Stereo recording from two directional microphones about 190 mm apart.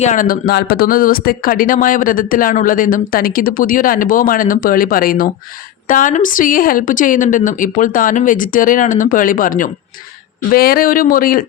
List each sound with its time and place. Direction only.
0.0 s speech: 45° left (ahead or behind)